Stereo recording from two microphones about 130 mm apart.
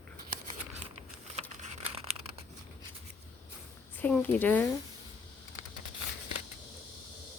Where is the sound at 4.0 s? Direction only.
10° left (ahead or behind).